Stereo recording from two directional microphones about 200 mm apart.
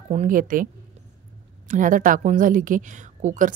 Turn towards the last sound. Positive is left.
turn(degrees=-40)  # may be behind; listen again after turning